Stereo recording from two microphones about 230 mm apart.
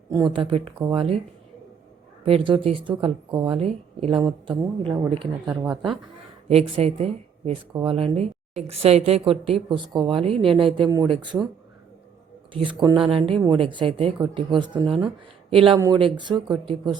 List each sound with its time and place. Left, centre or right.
0.1 s a woman's voice: centre
2.2 s a woman's voice: right
5.5 s speech: centre
6.5 s a woman's voice: right
12.5 s a woman's voice: right
14.8 s speech: centre
15.4 s a woman's voice: right